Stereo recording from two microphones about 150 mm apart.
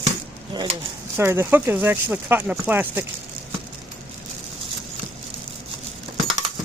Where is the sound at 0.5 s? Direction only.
30° right (ahead or behind).